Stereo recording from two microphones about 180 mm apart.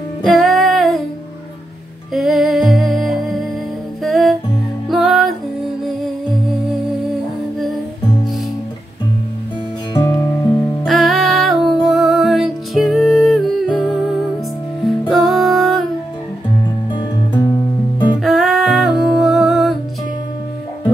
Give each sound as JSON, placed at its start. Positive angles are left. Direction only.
{"t": 0.2, "sound": "music", "side_deg": 0}
{"t": 2.1, "sound": "music", "side_deg": 0}
{"t": 7.5, "sound": "music", "side_deg": 0}
{"t": 10.1, "sound": "music", "side_deg": 15}
{"t": 10.9, "sound": "music", "side_deg": 0}
{"t": 14.9, "sound": "music", "side_deg": 0}
{"t": 16.9, "sound": "music", "side_deg": 25}
{"t": 18.2, "sound": "music", "side_deg": 0}